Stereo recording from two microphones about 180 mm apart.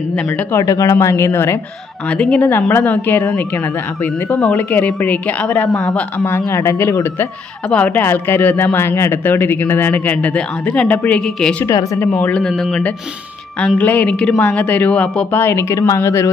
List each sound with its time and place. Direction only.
0.1 s a woman's voice: 5° left (ahead or behind)
11.6 s a woman's voice: 20° left (ahead or behind)
12.1 s a man's voice: 5° left (ahead or behind)